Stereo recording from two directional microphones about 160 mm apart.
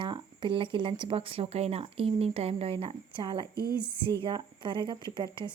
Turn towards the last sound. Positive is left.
turn(degrees=-30)  # may be behind; listen again after turning